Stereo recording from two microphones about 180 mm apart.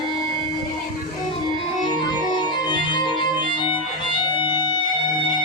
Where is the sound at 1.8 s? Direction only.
25° left (ahead or behind).